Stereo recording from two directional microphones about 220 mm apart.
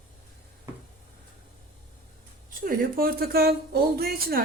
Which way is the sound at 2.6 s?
40° right (ahead or behind).